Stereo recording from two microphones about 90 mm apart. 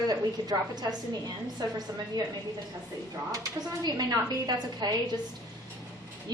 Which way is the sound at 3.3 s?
45° right (ahead or behind).